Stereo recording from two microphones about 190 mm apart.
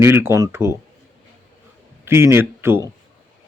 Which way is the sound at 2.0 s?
10° right (ahead or behind).